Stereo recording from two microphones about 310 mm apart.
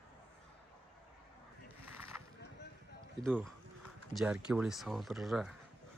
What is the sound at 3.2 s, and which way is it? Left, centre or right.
Speech, centre.